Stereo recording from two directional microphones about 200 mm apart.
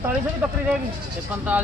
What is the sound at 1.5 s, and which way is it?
Speech, 5° right (ahead or behind).